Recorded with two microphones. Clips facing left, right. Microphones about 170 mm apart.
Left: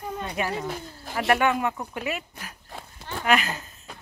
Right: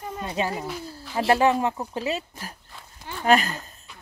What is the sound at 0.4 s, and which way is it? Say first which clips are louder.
Speech: right 2 dB; 25° right (ahead or behind).